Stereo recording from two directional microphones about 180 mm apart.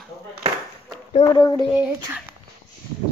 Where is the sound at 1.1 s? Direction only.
30° left (ahead or behind).